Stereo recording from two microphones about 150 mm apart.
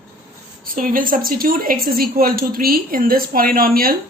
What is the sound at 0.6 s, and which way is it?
A woman's voice, 65° right (ahead or behind).